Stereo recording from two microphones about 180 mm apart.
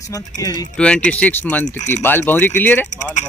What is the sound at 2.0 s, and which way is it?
Speech, 10° left (ahead or behind).